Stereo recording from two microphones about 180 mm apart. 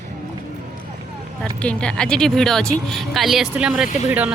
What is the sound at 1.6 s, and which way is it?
Speech, 5° left (ahead or behind).